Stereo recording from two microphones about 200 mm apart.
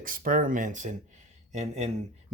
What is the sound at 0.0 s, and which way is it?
Speech, 45° right (ahead or behind).